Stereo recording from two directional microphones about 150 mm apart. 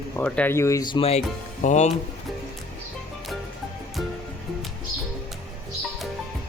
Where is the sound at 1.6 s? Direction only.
50° left (ahead or behind).